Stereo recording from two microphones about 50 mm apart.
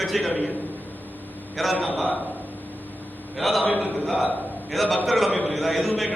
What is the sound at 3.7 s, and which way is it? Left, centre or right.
Speech, right.